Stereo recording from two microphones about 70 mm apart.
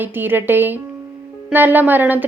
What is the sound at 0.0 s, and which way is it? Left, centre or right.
A woman's voice, right.